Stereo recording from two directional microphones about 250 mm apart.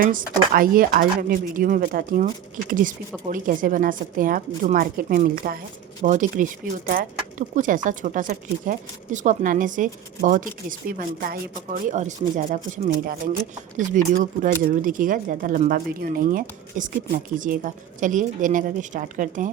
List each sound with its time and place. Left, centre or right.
0.0 s speech: right